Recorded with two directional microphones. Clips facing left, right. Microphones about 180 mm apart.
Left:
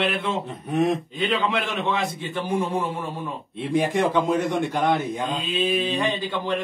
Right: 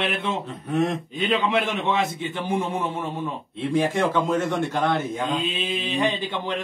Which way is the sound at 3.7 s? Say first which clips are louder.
Left 1 dB; 15° left (ahead or behind).